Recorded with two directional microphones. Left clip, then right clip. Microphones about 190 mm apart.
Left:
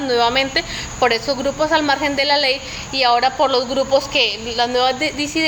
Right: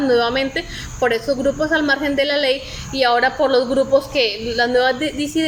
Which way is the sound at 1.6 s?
15° right (ahead or behind).